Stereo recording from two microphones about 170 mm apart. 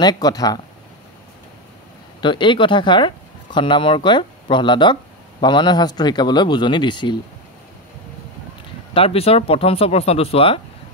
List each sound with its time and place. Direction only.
0.0 s speech: 25° left (ahead or behind)
2.2 s speech: 30° left (ahead or behind)
8.9 s speech: 35° left (ahead or behind)